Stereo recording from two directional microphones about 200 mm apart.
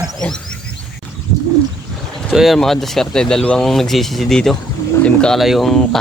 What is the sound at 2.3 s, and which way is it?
Speech, centre (ahead or behind).